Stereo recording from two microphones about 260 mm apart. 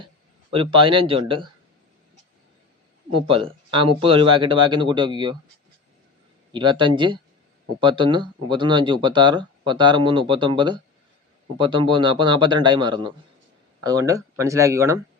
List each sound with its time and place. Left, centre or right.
0.5 s speech: centre
3.1 s speech: right
6.5 s speech: centre